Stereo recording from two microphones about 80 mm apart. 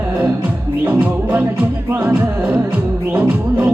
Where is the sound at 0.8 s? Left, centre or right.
Right.